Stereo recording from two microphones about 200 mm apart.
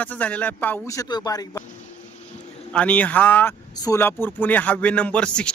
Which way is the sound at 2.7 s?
5° left (ahead or behind).